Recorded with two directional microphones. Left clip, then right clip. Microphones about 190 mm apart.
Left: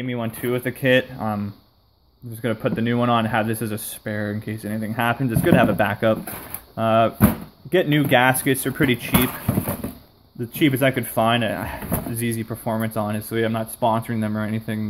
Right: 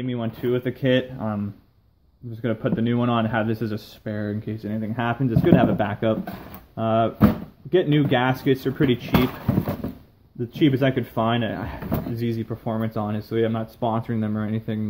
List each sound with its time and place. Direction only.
0.0 s speech: 20° left (ahead or behind)
2.4 s speech: 20° left (ahead or behind)
10.5 s speech: 15° left (ahead or behind)